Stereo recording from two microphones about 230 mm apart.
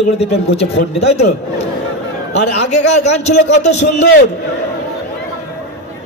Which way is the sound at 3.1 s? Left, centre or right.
Left.